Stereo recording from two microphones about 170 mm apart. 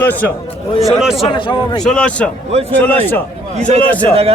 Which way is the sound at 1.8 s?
5° left (ahead or behind).